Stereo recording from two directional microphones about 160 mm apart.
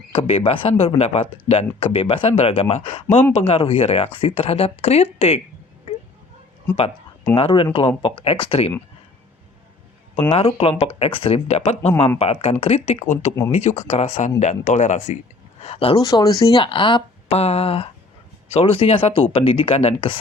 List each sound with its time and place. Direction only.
0.1 s speech: 35° left (ahead or behind)
7.3 s speech: 35° left (ahead or behind)
10.3 s speech: 40° left (ahead or behind)
15.6 s speech: 40° left (ahead or behind)
16.0 s speech: 25° left (ahead or behind)